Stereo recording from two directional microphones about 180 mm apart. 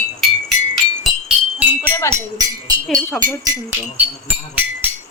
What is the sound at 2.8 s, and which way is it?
Speech, centre (ahead or behind).